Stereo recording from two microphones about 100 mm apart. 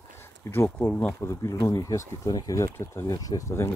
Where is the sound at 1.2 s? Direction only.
30° left (ahead or behind).